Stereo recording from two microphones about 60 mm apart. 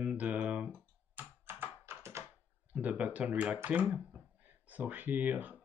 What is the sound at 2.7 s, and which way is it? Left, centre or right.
Speech, right.